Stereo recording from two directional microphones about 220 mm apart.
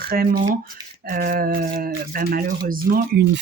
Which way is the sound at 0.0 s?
40° right (ahead or behind).